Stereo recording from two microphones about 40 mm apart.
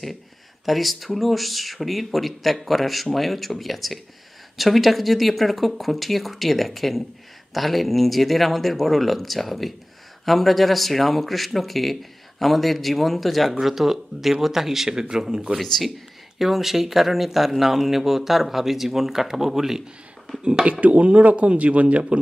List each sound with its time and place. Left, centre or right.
0.7 s speech: centre
20.4 s speech: right